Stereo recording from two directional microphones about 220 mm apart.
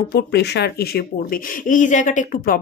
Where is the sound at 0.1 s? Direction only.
50° left (ahead or behind).